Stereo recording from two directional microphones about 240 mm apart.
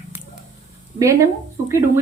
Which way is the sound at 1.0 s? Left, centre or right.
Centre.